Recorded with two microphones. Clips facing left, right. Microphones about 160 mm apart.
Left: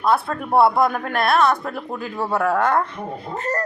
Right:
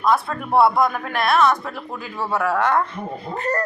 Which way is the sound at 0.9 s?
35° left (ahead or behind).